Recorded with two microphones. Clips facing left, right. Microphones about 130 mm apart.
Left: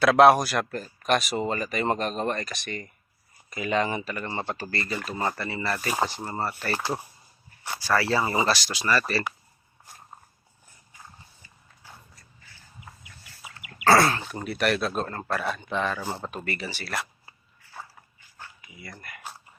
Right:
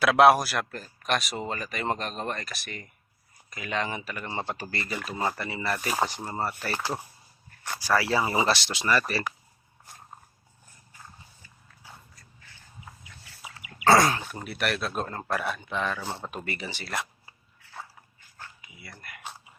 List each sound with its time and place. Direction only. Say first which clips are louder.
0.0 s speech: left 2 dB; 5° right (ahead or behind)
6.5 s speech: left 2 dB; centre (ahead or behind)
6.7 s speech: left 2 dB; 15° left (ahead or behind)
7.9 s speech: left 1 dB; 10° right (ahead or behind)
8.4 s speech: even; 25° right (ahead or behind)
13.8 s speech: left 1 dB; 15° right (ahead or behind); by 16.3 s centre (ahead or behind)
16.3 s speech: left 2 dB; 15° right (ahead or behind)
18.8 s speech: left 2 dB; centre (ahead or behind)